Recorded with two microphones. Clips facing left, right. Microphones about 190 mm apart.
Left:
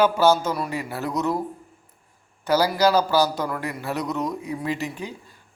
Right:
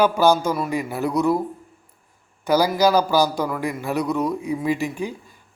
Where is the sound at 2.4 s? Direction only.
15° right (ahead or behind).